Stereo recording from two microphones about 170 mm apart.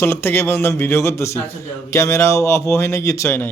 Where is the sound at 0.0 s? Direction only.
15° left (ahead or behind).